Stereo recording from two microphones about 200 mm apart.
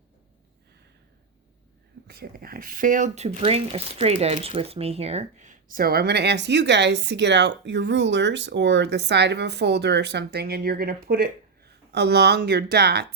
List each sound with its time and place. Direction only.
2.0 s speech: 50° right (ahead or behind)